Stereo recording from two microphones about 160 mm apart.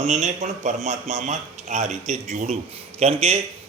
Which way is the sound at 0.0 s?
45° right (ahead or behind).